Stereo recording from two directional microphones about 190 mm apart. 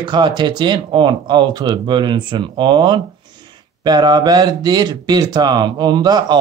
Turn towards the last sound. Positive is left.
turn(degrees=-20)  # may be behind; listen again after turning